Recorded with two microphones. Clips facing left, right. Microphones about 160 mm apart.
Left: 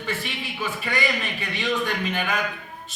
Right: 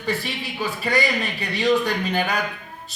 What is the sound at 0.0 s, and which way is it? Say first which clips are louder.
A man's voice: right 4 dB; 35° right (ahead or behind).